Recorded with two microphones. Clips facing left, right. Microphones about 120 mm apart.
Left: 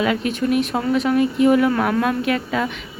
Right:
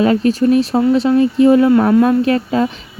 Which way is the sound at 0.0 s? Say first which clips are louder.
Right 8 dB; 35° right (ahead or behind).